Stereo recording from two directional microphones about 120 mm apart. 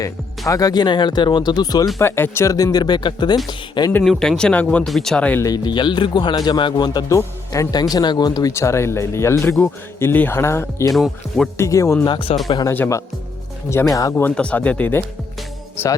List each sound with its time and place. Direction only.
0.0 s speech: 30° left (ahead or behind)
2.0 s speech: 20° left (ahead or behind); by 3.9 s 35° left (ahead or behind)
4.0 s speech: 5° left (ahead or behind)
4.9 s speech: centre (ahead or behind)
5.4 s speech: 35° left (ahead or behind)
7.2 s speech: 25° left (ahead or behind)
10.9 s speech: centre (ahead or behind)
11.5 s speech: 25° left (ahead or behind)
12.0 s speech: 40° left (ahead or behind)
12.7 s speech: 15° left (ahead or behind)